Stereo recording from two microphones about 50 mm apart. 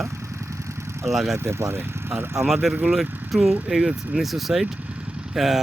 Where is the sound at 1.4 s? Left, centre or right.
Right.